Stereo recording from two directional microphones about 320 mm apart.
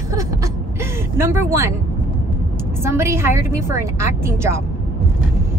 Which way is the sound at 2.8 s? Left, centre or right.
Centre.